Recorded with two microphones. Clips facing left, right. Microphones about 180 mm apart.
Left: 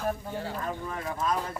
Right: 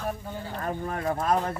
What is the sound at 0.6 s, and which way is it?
Speech, 45° right (ahead or behind).